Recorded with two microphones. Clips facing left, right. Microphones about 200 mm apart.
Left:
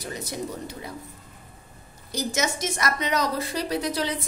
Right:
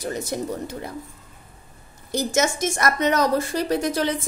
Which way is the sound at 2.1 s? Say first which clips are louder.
Right 5 dB; 50° right (ahead or behind).